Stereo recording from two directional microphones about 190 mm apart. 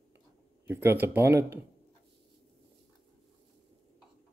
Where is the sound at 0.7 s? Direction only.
10° right (ahead or behind).